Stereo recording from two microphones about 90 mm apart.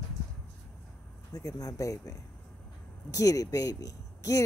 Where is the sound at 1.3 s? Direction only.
45° left (ahead or behind).